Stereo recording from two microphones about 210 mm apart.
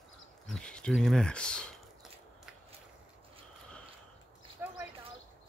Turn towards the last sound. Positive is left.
turn(degrees=-10)  # may be behind; listen again after turning